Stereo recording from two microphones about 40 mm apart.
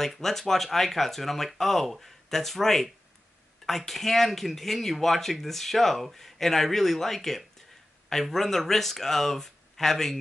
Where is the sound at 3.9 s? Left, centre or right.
Centre.